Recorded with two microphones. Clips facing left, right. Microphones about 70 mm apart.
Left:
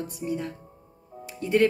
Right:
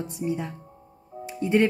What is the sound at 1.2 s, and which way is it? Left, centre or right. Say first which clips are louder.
Music: right 2 dB; right.